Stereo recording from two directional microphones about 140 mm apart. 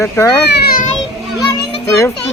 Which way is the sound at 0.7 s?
75° left (ahead or behind).